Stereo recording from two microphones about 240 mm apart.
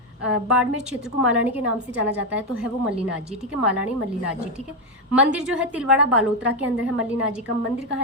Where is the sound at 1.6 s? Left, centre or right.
Right.